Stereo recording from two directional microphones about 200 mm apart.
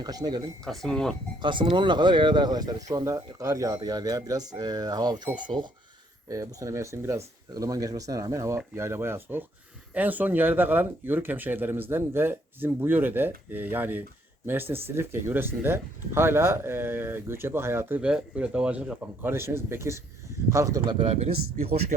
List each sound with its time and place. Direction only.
0.0 s speech: 20° right (ahead or behind)
0.6 s speech: centre (ahead or behind)
1.4 s speech: 25° right (ahead or behind)